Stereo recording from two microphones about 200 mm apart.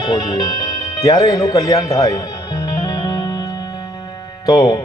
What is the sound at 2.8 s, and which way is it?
Music, 20° left (ahead or behind).